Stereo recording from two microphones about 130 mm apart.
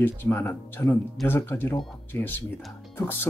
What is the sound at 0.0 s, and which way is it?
Speech, 15° left (ahead or behind).